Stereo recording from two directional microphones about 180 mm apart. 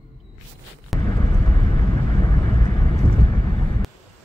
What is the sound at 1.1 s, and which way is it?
Vehicle, 20° left (ahead or behind).